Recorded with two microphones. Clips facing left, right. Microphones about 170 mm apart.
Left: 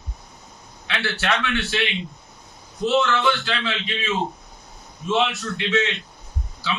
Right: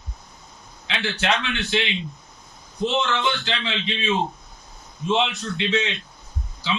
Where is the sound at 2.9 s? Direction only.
20° right (ahead or behind).